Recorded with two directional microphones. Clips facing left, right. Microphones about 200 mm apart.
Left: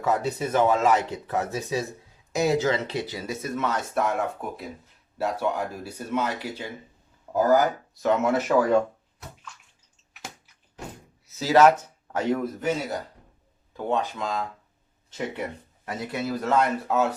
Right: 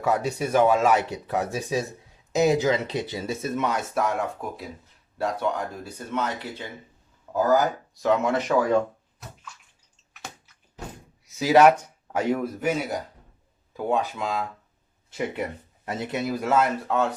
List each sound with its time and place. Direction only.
0.0 s speech: 10° right (ahead or behind)
3.9 s speech: centre (ahead or behind)
7.9 s speech: centre (ahead or behind)
11.3 s speech: 15° right (ahead or behind)
15.9 s speech: 25° right (ahead or behind); by 17.2 s 5° left (ahead or behind)